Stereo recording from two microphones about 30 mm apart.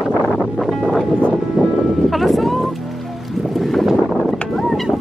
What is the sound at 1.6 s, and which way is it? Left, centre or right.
Music, right.